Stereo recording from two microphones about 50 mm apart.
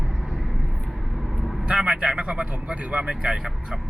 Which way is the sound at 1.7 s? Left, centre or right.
Centre.